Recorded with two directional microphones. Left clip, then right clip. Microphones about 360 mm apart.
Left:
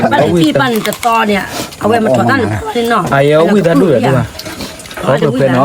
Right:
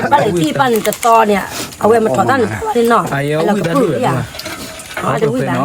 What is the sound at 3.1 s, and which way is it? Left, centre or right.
Speech, left.